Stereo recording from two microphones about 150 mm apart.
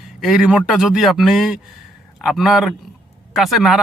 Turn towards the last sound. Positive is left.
turn(degrees=0)  # may be behind; listen again after turning